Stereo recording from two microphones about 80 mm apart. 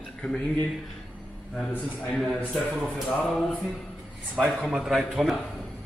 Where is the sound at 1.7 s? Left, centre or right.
Centre.